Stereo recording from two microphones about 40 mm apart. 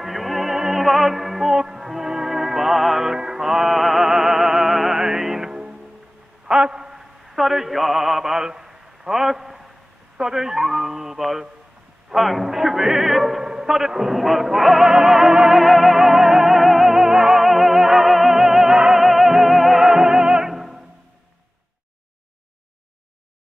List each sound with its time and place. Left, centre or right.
0.0 s music: centre
1.5 s music: centre
6.4 s a sound: right
7.2 s mantra: centre
10.1 s dog: centre
12.1 s music: centre
15.6 s music: centre